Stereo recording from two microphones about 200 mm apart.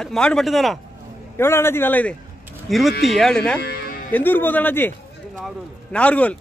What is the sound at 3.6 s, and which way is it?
Music, 50° left (ahead or behind).